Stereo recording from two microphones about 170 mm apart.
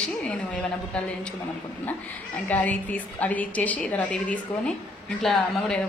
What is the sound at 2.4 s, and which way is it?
A woman's voice, 10° left (ahead or behind).